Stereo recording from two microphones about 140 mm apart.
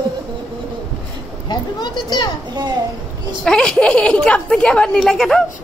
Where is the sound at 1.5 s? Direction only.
30° left (ahead or behind).